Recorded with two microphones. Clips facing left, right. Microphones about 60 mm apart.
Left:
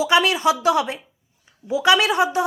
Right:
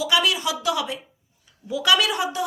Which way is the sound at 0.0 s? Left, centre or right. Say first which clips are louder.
Left 5 dB; left.